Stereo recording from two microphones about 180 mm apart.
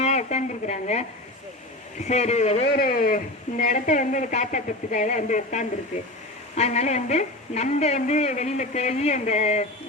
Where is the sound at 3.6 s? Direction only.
45° left (ahead or behind).